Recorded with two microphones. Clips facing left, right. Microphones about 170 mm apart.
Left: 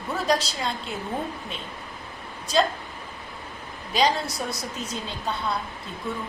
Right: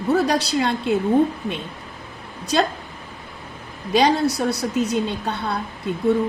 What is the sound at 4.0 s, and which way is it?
A woman's voice, 70° right (ahead or behind).